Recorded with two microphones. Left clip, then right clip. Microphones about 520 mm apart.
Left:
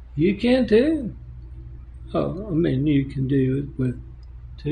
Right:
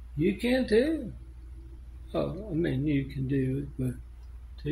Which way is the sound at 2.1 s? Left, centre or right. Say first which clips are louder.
Left 7 dB; right.